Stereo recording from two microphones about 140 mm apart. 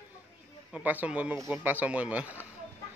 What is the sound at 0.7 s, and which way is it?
A man's voice, 10° right (ahead or behind).